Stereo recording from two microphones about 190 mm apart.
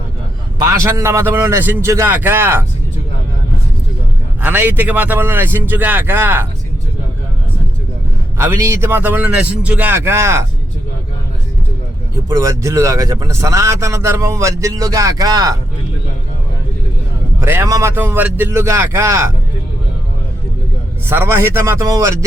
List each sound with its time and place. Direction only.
0.7 s speech: 15° right (ahead or behind)
4.4 s speech: 10° right (ahead or behind)
8.4 s speech: 15° right (ahead or behind)
12.1 s speech: 15° right (ahead or behind)
17.4 s speech: 15° right (ahead or behind)
21.1 s speech: 15° right (ahead or behind)